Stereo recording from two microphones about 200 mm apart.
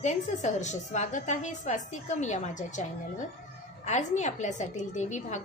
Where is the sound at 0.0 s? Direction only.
35° left (ahead or behind).